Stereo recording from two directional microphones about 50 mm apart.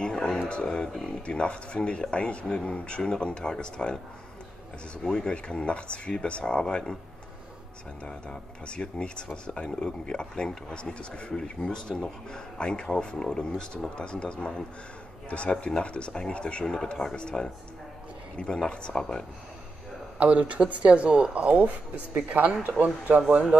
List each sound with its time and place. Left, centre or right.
0.0 s a sound: centre
0.5 s speech: centre
5.0 s speech: centre
8.0 s a man's voice: centre
16.7 s speech: centre
20.2 s speech: right